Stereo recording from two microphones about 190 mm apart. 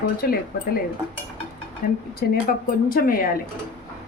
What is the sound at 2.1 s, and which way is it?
A woman's voice, 50° left (ahead or behind).